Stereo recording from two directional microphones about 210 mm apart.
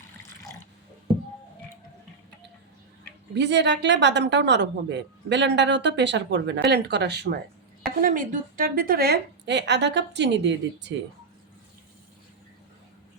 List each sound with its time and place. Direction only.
3.3 s a woman's voice: 55° right (ahead or behind)
8.0 s a woman's voice: 40° right (ahead or behind); by 10.9 s 55° right (ahead or behind)